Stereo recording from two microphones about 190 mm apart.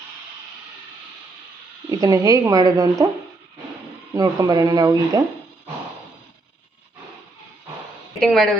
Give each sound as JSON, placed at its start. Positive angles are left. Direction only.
{"t": 1.9, "sound": "speech", "side_deg": -20}
{"t": 4.1, "sound": "speech", "side_deg": -20}
{"t": 8.2, "sound": "speech", "side_deg": 0}